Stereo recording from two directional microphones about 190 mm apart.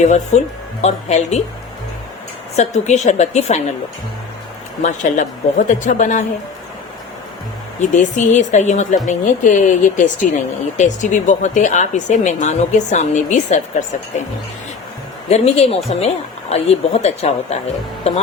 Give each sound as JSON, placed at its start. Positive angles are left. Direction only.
{"t": 0.0, "sound": "speech", "side_deg": 40}
{"t": 2.6, "sound": "speech", "side_deg": 35}
{"t": 4.8, "sound": "speech", "side_deg": 40}
{"t": 7.8, "sound": "speech", "side_deg": 40}
{"t": 15.3, "sound": "speech", "side_deg": 35}